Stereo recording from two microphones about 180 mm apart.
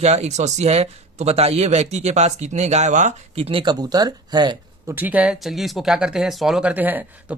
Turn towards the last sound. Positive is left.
turn(degrees=-10)  # may be behind; listen again after turning